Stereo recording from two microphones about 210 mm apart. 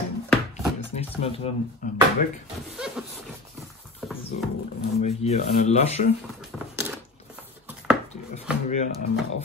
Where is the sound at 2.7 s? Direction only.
5° right (ahead or behind).